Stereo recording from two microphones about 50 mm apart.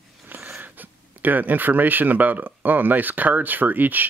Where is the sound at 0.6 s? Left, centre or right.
Right.